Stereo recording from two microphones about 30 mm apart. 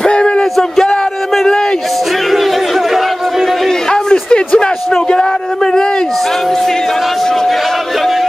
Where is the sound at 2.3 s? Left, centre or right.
Centre.